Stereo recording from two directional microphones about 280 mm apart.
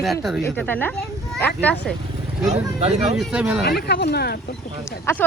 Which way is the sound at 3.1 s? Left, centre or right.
Centre.